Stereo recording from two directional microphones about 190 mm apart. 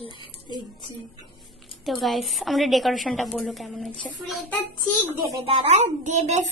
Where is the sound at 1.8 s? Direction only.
Centre (ahead or behind).